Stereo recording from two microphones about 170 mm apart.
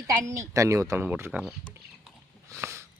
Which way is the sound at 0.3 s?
20° right (ahead or behind).